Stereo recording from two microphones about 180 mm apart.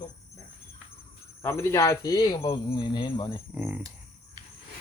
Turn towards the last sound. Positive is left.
turn(degrees=-10)  # may be behind; listen again after turning